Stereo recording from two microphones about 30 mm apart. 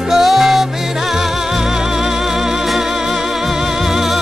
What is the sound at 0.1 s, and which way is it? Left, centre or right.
Music, centre.